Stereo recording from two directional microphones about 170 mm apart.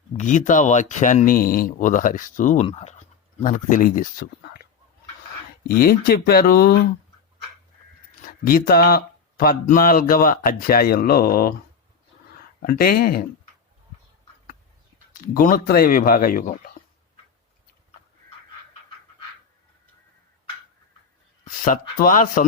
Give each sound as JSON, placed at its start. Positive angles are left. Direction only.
{"t": 0.2, "sound": "speech", "side_deg": 45}
{"t": 2.6, "sound": "speech", "side_deg": 40}
{"t": 3.4, "sound": "speech", "side_deg": 50}
{"t": 5.6, "sound": "speech", "side_deg": 60}
{"t": 8.4, "sound": "speech", "side_deg": 60}
{"t": 12.6, "sound": "speech", "side_deg": 60}
{"t": 15.2, "sound": "speech", "side_deg": 55}
{"t": 21.4, "sound": "speech", "side_deg": 55}